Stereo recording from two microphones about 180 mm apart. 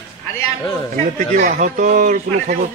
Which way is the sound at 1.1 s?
50° right (ahead or behind).